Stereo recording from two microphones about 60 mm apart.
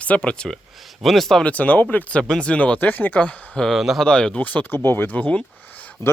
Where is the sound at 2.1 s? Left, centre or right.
Centre.